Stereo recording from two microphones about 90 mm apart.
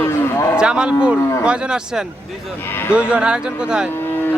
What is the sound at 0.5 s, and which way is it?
Speech, 10° right (ahead or behind).